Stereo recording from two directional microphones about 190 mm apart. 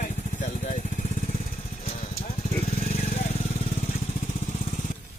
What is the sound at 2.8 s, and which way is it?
Vehicle, 45° left (ahead or behind).